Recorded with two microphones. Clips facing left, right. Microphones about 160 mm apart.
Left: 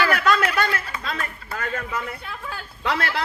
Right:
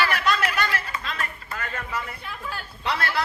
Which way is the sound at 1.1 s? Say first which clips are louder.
Left 2 dB; 90° left.